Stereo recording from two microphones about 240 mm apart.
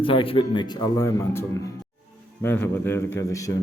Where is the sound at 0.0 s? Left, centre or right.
Left.